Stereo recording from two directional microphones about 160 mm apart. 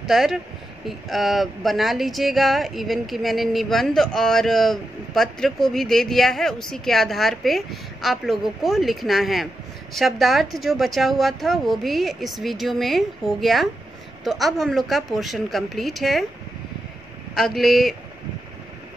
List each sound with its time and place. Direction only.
0.0 s speech: centre (ahead or behind)
17.3 s speech: centre (ahead or behind)